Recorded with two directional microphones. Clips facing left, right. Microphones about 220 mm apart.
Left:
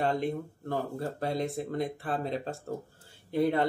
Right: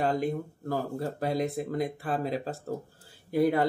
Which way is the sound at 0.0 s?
Centre (ahead or behind).